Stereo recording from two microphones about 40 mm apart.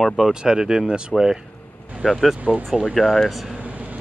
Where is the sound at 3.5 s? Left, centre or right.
Right.